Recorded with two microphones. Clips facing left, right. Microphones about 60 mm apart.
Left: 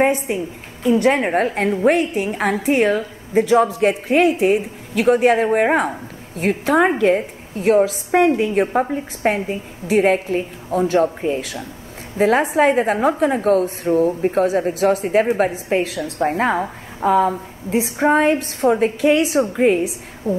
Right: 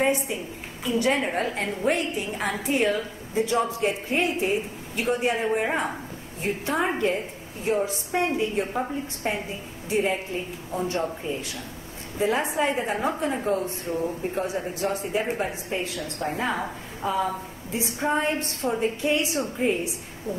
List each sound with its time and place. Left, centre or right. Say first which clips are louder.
0.0 s a woman's voice: left 7 dB; left
6.4 s a woman's voice: left 10 dB; left
8.3 s a woman's voice: left 9 dB; left
13.8 s a woman's voice: left 11 dB; left
15.0 s a woman's voice: left 10 dB; left
16.2 s a woman's voice: left 9 dB; left